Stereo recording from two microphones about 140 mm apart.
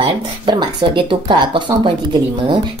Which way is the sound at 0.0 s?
35° right (ahead or behind).